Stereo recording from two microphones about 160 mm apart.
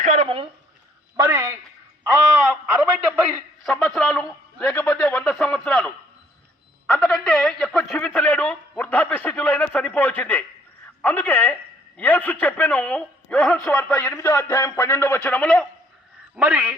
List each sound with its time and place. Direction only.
0.0 s a sound: 45° right (ahead or behind)
1.1 s a man's voice: 20° right (ahead or behind)
3.0 s a man's voice: centre (ahead or behind)
6.8 s a sound: 5° left (ahead or behind)
11.0 s a man's voice: 10° left (ahead or behind)
16.3 s a man's voice: 10° right (ahead or behind)